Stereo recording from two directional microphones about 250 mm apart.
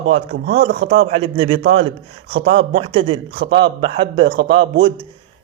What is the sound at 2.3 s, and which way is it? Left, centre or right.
Speech, right.